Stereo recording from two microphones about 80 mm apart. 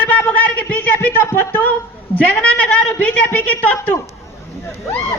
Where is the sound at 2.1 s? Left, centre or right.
Centre.